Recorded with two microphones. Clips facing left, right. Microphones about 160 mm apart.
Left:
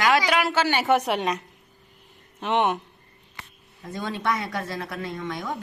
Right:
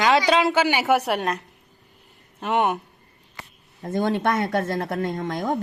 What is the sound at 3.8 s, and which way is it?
Speech, 50° right (ahead or behind).